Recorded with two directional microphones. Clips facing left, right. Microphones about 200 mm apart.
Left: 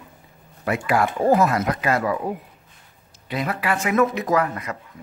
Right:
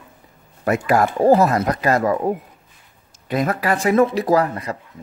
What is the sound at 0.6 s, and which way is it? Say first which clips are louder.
Speech: right 4 dB; 45° right (ahead or behind).